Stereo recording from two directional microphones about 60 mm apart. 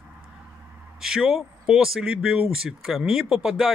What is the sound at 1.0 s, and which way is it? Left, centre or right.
Speech, centre.